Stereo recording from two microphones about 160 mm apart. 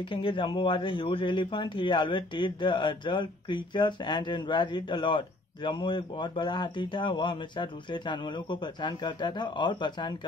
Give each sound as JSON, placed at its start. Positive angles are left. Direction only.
{"t": 0.0, "sound": "speech", "side_deg": 35}